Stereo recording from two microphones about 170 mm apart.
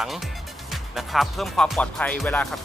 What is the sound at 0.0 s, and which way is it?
Music, centre (ahead or behind).